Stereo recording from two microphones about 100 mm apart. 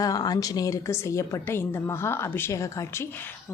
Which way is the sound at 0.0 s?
40° left (ahead or behind).